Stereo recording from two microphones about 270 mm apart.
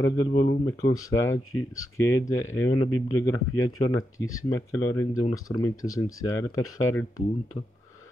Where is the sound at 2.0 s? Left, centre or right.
Centre.